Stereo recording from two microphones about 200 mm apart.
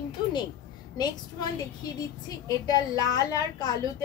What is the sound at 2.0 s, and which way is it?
A woman's voice, 20° left (ahead or behind).